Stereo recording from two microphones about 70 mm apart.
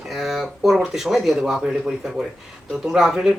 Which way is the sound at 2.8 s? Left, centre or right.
Centre.